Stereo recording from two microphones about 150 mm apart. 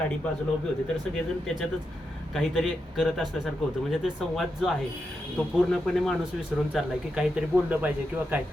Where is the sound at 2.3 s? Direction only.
5° left (ahead or behind).